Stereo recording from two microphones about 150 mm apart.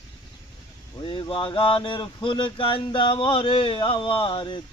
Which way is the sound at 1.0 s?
35° left (ahead or behind).